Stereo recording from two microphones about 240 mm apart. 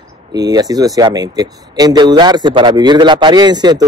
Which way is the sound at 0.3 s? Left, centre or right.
Centre.